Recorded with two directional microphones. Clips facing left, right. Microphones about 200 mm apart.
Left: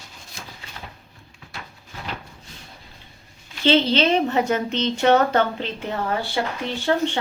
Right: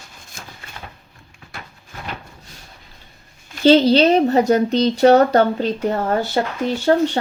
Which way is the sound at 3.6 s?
40° right (ahead or behind).